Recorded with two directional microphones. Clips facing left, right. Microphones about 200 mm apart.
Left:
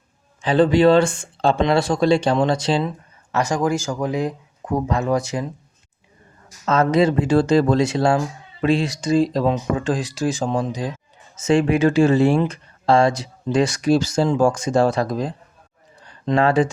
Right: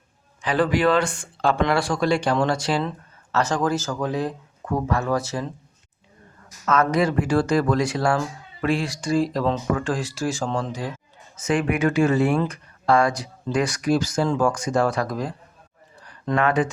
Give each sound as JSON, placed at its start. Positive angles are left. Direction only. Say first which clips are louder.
{"t": 0.4, "sound": "speech", "louder": "left 6 dB", "side_deg": 25}
{"t": 3.3, "sound": "speech", "louder": "left 2 dB", "side_deg": 10}
{"t": 6.7, "sound": "speech", "louder": "left 4 dB", "side_deg": 25}